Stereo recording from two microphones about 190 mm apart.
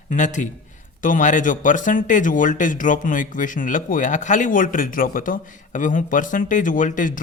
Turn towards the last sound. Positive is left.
turn(degrees=45)  # may be behind; listen again after turning